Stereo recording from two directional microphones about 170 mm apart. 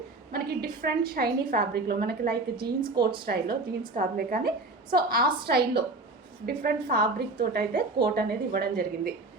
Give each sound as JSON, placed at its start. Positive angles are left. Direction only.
{"t": 0.6, "sound": "a woman's voice", "side_deg": -60}